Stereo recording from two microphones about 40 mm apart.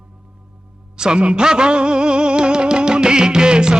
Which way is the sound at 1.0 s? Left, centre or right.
Right.